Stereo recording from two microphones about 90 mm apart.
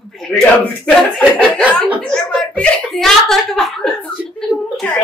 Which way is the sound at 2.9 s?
5° left (ahead or behind).